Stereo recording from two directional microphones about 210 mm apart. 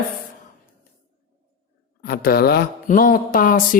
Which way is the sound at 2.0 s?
45° left (ahead or behind).